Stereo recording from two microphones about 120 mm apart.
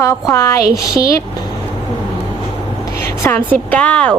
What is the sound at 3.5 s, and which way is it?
Speech, 10° left (ahead or behind).